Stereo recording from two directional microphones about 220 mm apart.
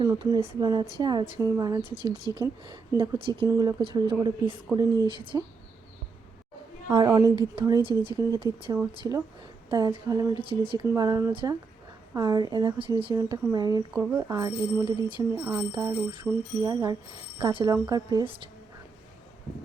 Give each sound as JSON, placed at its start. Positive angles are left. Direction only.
{"t": 0.0, "sound": "speech", "side_deg": -20}
{"t": 6.8, "sound": "speech", "side_deg": -15}